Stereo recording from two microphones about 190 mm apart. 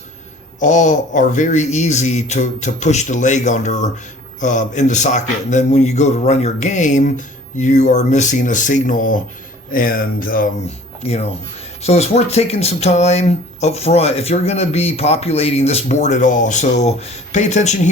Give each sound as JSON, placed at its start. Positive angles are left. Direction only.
{"t": 0.6, "sound": "speech", "side_deg": 40}
{"t": 11.0, "sound": "speech", "side_deg": 30}